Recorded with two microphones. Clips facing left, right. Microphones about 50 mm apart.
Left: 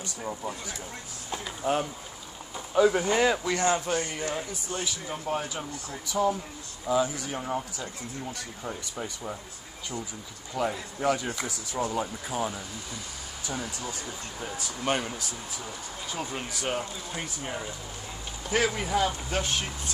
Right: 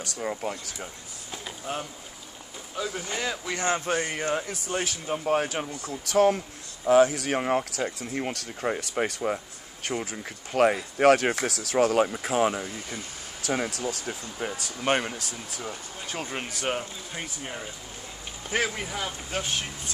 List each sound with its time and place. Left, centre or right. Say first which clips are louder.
0.0 s speech: right 4 dB; right
0.3 s speech: right 2 dB; right
1.6 s speech: left 7 dB; left
3.1 s speech: left 7 dB; centre
3.5 s speech: left 2 dB; right
3.8 s speech: right 2 dB; right
4.5 s speech: right 3 dB; right
6.0 s speech: right 5 dB; right
10.5 s speech: right 8 dB; right
14.4 s speech: right 3 dB; right
17.1 s speech: even; centre
18.9 s speech: left 6 dB; centre